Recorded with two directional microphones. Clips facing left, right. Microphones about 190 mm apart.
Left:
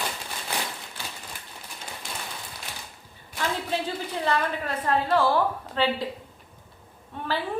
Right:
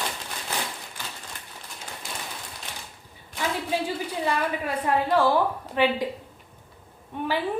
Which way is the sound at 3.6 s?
10° right (ahead or behind).